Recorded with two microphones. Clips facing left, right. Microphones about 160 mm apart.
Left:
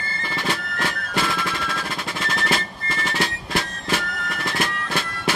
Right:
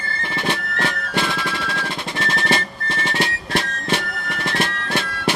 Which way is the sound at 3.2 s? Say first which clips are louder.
Right 2 dB; 25° right (ahead or behind).